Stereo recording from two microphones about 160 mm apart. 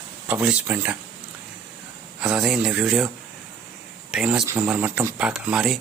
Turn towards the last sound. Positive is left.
turn(degrees=-5)  # may be behind; listen again after turning